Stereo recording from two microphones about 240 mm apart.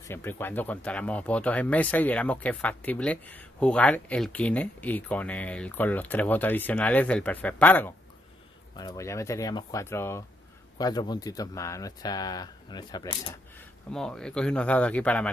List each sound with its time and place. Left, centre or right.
0.0 s speech: centre